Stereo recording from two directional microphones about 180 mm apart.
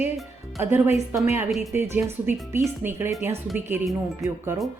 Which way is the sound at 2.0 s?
10° right (ahead or behind).